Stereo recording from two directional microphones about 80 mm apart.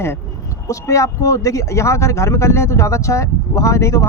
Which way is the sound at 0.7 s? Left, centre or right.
Left.